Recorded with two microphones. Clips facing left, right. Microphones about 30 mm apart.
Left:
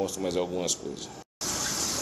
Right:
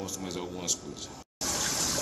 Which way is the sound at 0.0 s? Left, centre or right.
Centre.